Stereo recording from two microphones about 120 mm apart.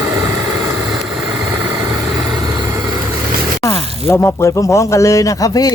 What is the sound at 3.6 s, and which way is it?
Speech, 25° left (ahead or behind).